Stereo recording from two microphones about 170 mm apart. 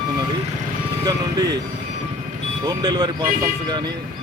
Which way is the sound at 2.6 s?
25° right (ahead or behind).